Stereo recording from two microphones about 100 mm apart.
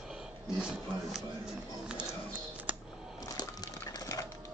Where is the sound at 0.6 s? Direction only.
10° right (ahead or behind).